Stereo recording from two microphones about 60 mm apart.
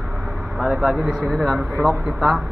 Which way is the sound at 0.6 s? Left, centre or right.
Centre.